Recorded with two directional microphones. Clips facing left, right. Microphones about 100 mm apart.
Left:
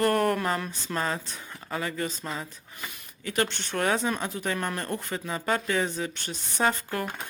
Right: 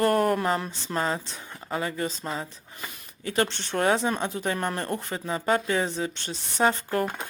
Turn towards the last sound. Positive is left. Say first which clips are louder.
# right 3 dB
turn(degrees=-30)  # may be behind; listen again after turning